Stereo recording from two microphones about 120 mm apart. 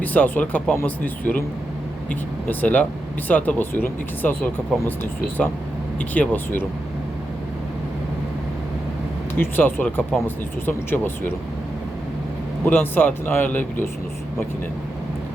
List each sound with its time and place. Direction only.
0.0 s speech: 15° left (ahead or behind)
6.0 s speech: 15° left (ahead or behind)
9.4 s speech: 15° left (ahead or behind)
12.6 s speech: 15° left (ahead or behind)